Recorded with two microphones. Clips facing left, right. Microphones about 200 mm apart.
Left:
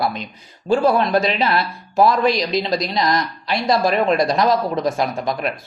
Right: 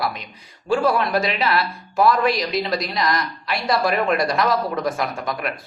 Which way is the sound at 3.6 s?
25° left (ahead or behind).